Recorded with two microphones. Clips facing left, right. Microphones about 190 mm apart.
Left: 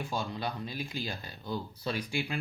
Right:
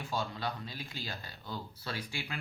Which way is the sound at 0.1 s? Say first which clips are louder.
Right 2 dB; 15° left (ahead or behind).